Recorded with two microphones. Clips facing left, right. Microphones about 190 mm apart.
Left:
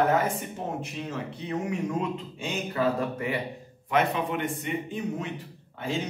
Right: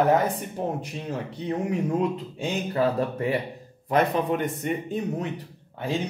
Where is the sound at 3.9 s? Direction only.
40° right (ahead or behind).